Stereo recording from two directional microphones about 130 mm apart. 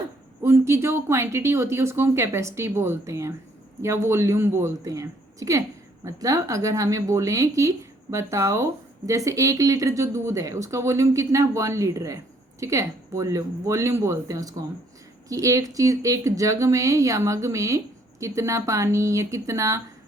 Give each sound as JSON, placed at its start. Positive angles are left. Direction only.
{"t": 0.4, "sound": "speech", "side_deg": -20}